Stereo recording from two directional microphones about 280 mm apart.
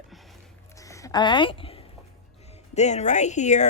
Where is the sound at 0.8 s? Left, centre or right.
Centre.